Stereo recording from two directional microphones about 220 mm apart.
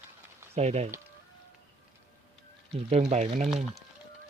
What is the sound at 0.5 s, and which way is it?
Speech, 30° right (ahead or behind).